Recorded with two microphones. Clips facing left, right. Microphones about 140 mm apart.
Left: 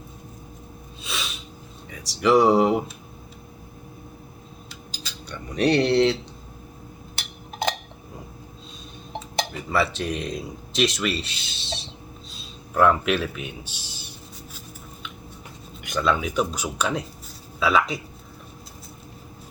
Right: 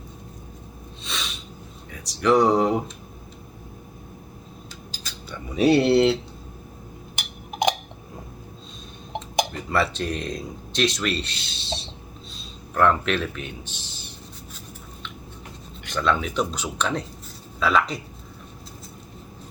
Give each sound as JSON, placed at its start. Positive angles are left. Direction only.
{"t": 1.0, "sound": "sneeze", "side_deg": 5}
{"t": 1.9, "sound": "speech", "side_deg": 5}
{"t": 5.3, "sound": "speech", "side_deg": -5}
{"t": 7.2, "sound": "a sound", "side_deg": -15}
{"t": 9.1, "sound": "dishes", "side_deg": -15}
{"t": 9.5, "sound": "speech", "side_deg": 5}
{"t": 15.9, "sound": "speech", "side_deg": 10}